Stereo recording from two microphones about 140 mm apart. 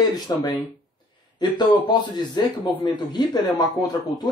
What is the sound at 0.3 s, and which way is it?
A man's voice, 25° left (ahead or behind).